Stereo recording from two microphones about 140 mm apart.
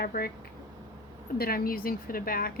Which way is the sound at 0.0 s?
90° left.